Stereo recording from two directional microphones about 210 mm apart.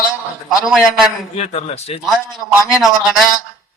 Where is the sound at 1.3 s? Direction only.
30° left (ahead or behind).